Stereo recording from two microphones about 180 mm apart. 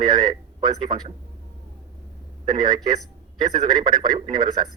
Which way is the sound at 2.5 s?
25° right (ahead or behind).